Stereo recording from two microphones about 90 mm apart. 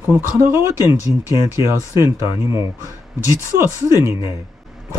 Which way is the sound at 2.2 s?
30° right (ahead or behind).